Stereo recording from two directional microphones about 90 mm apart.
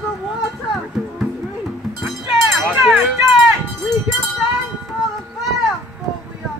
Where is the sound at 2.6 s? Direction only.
Centre (ahead or behind).